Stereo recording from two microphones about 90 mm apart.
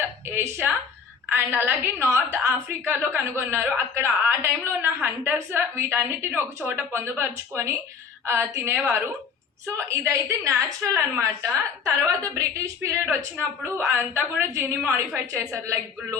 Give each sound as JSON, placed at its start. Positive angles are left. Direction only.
{"t": 0.3, "sound": "a woman's voice", "side_deg": -25}